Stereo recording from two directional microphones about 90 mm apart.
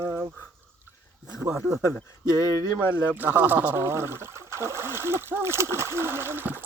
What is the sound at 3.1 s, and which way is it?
Speech, 20° right (ahead or behind).